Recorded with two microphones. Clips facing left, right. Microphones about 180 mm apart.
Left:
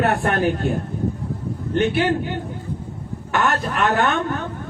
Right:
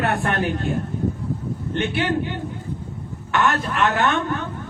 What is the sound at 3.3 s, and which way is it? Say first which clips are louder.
Speech: even; 40° left (ahead or behind).